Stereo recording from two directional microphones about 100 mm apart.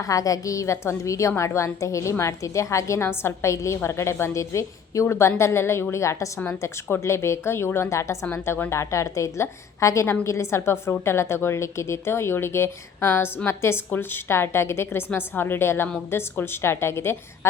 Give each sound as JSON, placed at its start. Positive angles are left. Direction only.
{"t": 0.0, "sound": "a woman's voice", "side_deg": 35}